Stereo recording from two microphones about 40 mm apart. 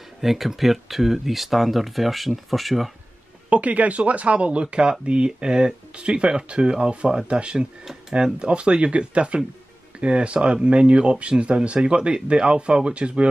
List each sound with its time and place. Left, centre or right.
0.2 s speech: centre
3.4 s speech: right